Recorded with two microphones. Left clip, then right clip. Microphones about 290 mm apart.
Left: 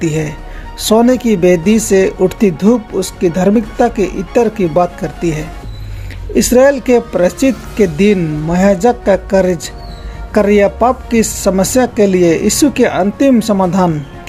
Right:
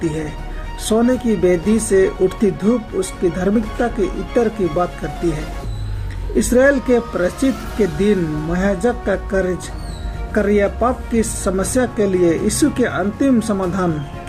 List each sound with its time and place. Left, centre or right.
0.9 s speech: left
6.3 s speech: left